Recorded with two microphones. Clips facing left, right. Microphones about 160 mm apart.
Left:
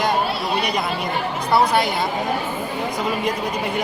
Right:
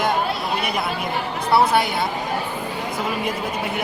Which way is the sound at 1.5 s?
5° right (ahead or behind).